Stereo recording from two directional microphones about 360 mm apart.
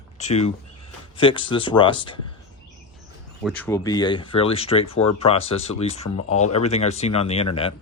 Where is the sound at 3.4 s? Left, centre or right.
Centre.